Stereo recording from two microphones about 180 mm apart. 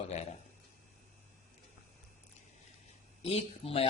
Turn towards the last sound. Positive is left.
turn(degrees=30)  # may be behind; listen again after turning